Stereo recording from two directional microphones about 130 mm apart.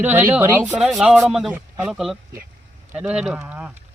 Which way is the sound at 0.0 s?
15° right (ahead or behind).